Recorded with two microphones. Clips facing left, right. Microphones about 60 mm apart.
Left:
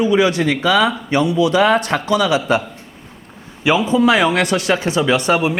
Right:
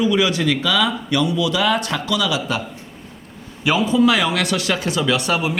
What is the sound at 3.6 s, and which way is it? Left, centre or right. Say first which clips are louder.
Speech: left 2 dB; left.